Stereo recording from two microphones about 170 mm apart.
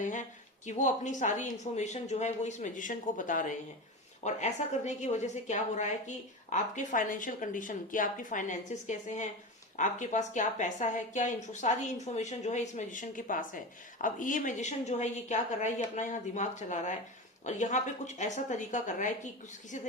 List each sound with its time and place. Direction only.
0.0 s a woman's voice: 45° left (ahead or behind)